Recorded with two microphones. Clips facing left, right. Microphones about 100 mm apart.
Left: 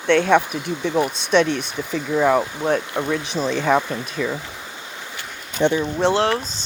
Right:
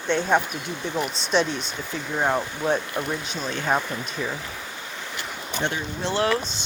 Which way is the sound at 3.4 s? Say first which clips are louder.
Left 6 dB; 90° left.